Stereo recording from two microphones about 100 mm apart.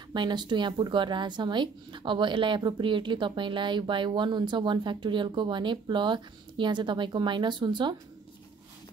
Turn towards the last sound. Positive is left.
turn(degrees=-50)  # may be behind; listen again after turning